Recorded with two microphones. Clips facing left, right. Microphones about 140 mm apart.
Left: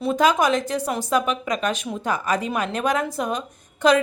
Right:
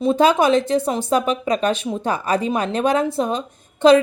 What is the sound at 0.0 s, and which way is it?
Speech, 30° right (ahead or behind).